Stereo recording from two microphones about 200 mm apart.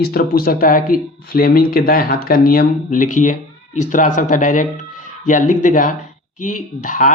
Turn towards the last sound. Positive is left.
turn(degrees=40)  # may be behind; listen again after turning